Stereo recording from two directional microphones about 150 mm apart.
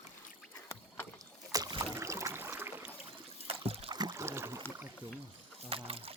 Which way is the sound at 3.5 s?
40° right (ahead or behind).